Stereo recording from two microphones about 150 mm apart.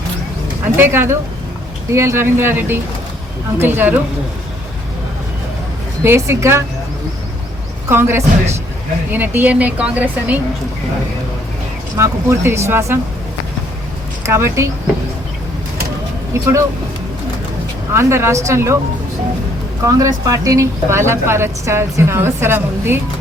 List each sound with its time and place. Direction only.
0.6 s speech: 15° right (ahead or behind)
6.0 s speech: 15° right (ahead or behind)
7.9 s speech: 15° right (ahead or behind)
11.9 s speech: 15° right (ahead or behind)
14.3 s speech: 20° right (ahead or behind)
17.9 s speech: 15° right (ahead or behind)
19.8 s speech: 25° right (ahead or behind)